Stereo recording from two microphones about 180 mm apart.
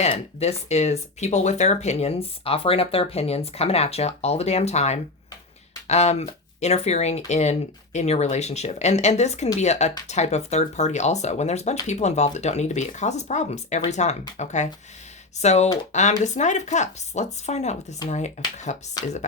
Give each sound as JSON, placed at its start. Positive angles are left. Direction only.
{"t": 0.0, "sound": "speech", "side_deg": 35}